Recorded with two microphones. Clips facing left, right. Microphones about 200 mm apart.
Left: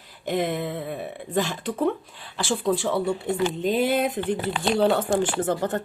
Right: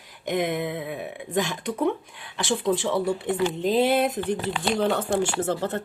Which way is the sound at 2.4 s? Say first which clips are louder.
Even; 20° right (ahead or behind).